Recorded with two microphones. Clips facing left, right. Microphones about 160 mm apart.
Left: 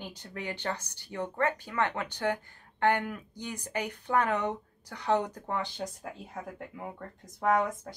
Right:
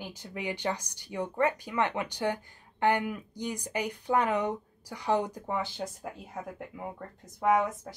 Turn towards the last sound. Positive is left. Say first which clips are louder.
# right 1 dB
turn(degrees=0)  # may be behind; listen again after turning